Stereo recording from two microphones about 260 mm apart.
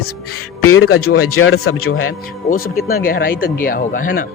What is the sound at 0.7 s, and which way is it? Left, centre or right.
Speech, left.